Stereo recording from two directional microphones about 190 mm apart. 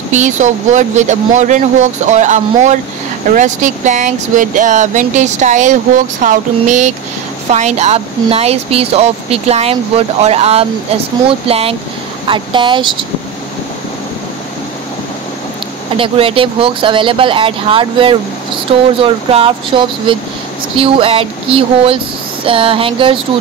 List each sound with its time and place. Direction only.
0.1 s speech: 40° right (ahead or behind)
16.0 s speech: 30° right (ahead or behind)